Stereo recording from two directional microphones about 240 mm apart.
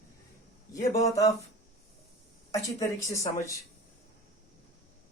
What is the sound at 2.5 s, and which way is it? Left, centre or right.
Speech, centre.